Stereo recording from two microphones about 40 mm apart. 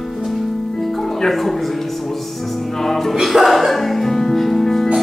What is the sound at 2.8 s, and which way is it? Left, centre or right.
Music, centre.